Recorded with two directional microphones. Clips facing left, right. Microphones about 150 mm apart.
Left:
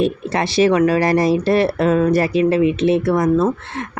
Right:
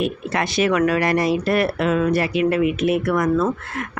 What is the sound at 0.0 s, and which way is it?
Speech, 30° left (ahead or behind).